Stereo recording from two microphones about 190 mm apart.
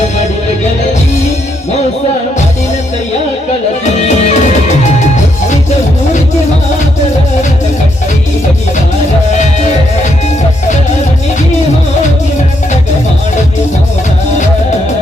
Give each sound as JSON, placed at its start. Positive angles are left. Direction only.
{"t": 4.0, "sound": "music", "side_deg": 40}
{"t": 9.4, "sound": "music", "side_deg": 40}